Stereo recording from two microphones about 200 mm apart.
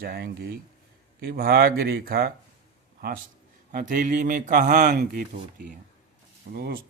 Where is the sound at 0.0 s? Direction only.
50° right (ahead or behind).